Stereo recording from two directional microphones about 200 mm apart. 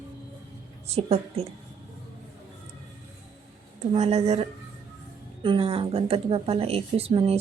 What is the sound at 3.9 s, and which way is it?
A woman's voice, 30° right (ahead or behind).